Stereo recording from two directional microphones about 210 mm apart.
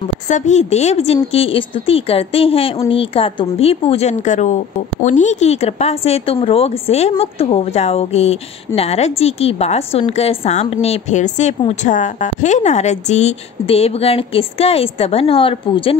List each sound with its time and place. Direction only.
0.3 s speech: 35° left (ahead or behind)